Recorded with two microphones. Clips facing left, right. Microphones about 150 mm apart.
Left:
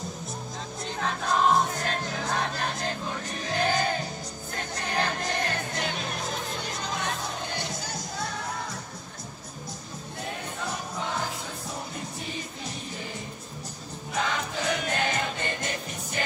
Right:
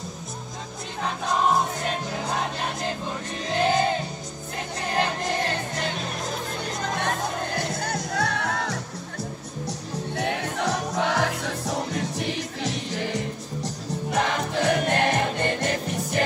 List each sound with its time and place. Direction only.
1.0 s music: centre (ahead or behind)
3.4 s music: 25° right (ahead or behind)
5.8 s music: centre (ahead or behind)
6.8 s music: 50° right (ahead or behind)
7.8 s music: 65° right (ahead or behind)
10.1 s music: 85° right
14.1 s music: 70° right (ahead or behind)